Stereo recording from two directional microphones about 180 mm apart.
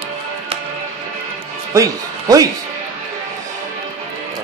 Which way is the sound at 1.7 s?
20° right (ahead or behind).